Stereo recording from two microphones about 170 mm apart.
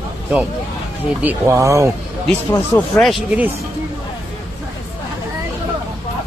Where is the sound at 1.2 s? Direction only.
15° right (ahead or behind).